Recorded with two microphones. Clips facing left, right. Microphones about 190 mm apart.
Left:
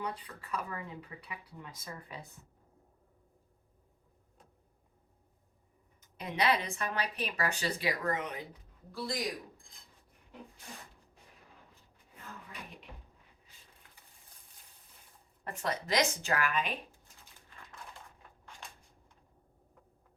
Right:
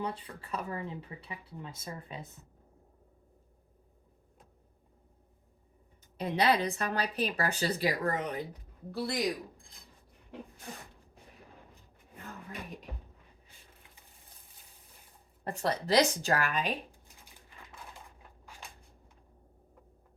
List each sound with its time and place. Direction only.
0.0 s speech: 30° right (ahead or behind)
6.0 s speech: 30° right (ahead or behind)
8.9 s a man's voice: 65° right (ahead or behind)
12.5 s music: 40° right (ahead or behind)
15.4 s speech: 35° right (ahead or behind)